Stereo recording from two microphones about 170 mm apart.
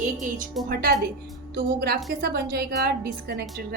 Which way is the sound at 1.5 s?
65° right (ahead or behind).